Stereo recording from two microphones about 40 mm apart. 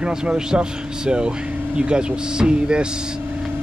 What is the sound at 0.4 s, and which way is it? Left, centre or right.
Speech, centre.